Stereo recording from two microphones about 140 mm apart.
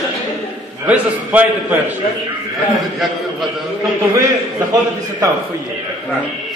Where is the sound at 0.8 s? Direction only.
10° right (ahead or behind).